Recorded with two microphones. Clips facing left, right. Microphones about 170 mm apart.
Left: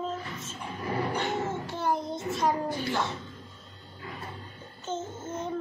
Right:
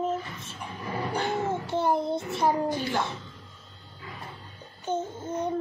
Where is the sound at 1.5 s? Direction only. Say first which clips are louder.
Right 4 dB; 20° right (ahead or behind).